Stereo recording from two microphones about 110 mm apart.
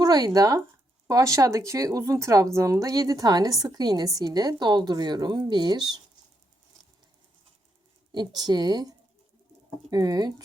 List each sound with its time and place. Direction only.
0.0 s a woman's voice: 35° right (ahead or behind)
8.1 s a woman's voice: 40° right (ahead or behind)